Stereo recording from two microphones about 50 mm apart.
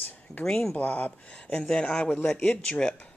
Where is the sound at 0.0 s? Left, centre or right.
Left.